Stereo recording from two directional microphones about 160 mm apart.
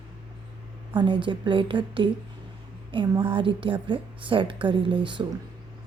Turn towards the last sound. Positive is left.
turn(degrees=-30)  # may be behind; listen again after turning